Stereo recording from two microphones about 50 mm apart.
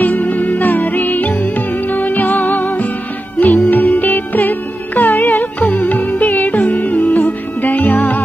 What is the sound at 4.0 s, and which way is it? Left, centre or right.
Music, left.